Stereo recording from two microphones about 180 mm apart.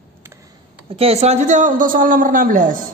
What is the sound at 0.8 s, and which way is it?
A man's voice, 30° right (ahead or behind).